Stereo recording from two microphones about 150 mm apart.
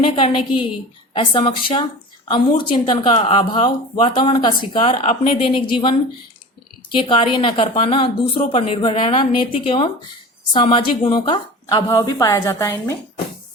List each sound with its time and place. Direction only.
0.0 s speech: 35° left (ahead or behind)
6.9 s speech: 35° left (ahead or behind)
11.9 s a woman's voice: 20° left (ahead or behind)